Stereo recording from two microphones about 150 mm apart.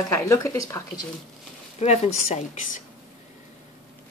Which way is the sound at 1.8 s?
45° left (ahead or behind).